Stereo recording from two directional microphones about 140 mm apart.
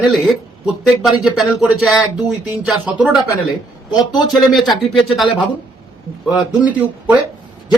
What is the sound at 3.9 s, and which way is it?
Speech, 30° left (ahead or behind).